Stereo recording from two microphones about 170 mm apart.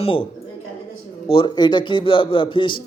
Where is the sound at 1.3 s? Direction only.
30° left (ahead or behind).